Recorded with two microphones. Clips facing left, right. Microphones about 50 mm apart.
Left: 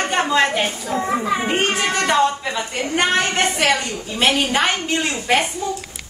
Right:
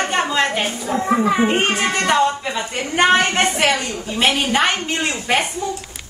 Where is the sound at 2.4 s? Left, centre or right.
Centre.